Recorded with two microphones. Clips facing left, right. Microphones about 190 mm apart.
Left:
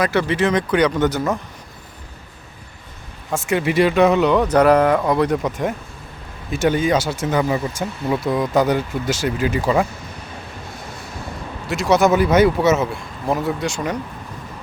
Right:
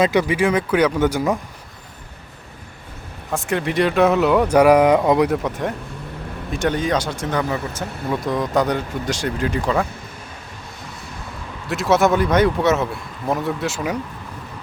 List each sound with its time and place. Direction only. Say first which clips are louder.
0.0 s speech: right 1 dB; 15° right (ahead or behind)
3.3 s speech: left 2 dB; 5° left (ahead or behind); by 5.3 s 15° right (ahead or behind)
5.3 s speech: left 1 dB; centre (ahead or behind)
11.7 s speech: left 1 dB; centre (ahead or behind)